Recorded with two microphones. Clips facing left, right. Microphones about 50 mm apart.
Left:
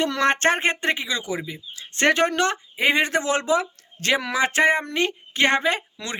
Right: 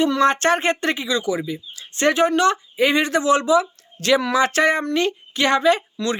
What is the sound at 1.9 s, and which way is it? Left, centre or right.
Speech, left.